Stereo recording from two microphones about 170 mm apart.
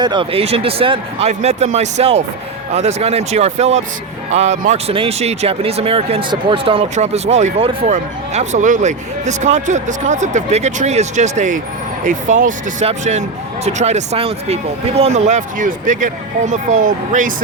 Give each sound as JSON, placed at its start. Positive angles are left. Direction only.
{"t": 0.0, "sound": "speech", "side_deg": -30}